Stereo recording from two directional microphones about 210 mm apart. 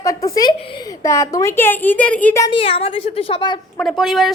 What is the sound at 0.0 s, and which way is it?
A woman's voice, 15° left (ahead or behind).